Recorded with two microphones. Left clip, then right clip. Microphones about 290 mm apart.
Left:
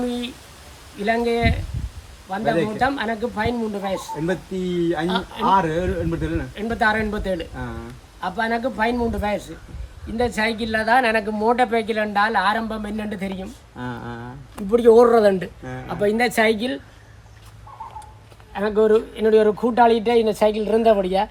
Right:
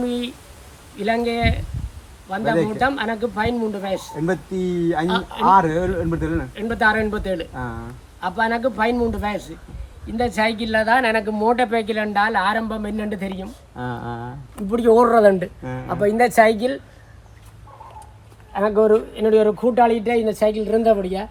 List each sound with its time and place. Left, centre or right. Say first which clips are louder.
0.0 s a sound: right 2 dB; centre
0.9 s speech: even; centre
5.0 s speech: right 2 dB; centre
5.5 s a woman's voice: right 3 dB; centre
7.5 s a woman's voice: right 3 dB; centre
8.2 s speech: right 2 dB; centre
13.7 s a woman's voice: right 3 dB; centre
14.7 s a woman's voice: left 2 dB; centre
18.5 s a woman's voice: right 1 dB; centre